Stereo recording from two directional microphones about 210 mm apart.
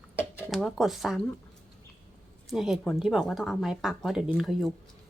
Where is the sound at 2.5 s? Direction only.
Centre (ahead or behind).